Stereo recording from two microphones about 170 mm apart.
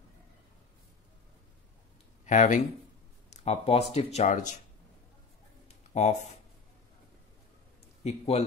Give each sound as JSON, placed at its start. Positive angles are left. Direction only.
{"t": 2.2, "sound": "speech", "side_deg": 50}
{"t": 5.9, "sound": "speech", "side_deg": 40}
{"t": 8.0, "sound": "a man's voice", "side_deg": 40}